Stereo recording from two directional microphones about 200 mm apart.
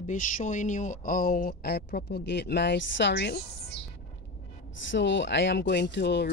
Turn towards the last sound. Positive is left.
turn(degrees=60)  # may be behind; listen again after turning